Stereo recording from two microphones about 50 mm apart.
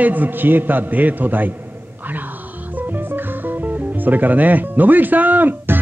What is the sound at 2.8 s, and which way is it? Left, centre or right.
Music, right.